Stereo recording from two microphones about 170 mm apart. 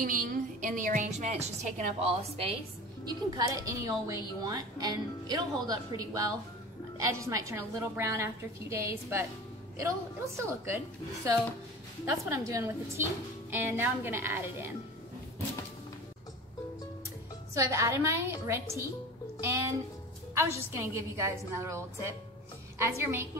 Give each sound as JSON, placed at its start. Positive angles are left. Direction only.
{"t": 0.0, "sound": "a woman's voice", "side_deg": -55}
{"t": 3.3, "sound": "a woman's voice", "side_deg": -20}
{"t": 12.1, "sound": "a woman's voice", "side_deg": -20}
{"t": 17.6, "sound": "a woman's voice", "side_deg": -15}